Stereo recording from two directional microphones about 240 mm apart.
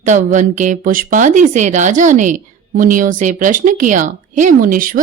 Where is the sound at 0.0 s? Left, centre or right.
Right.